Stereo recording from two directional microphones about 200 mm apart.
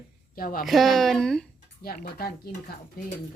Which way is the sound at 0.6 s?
Centre (ahead or behind).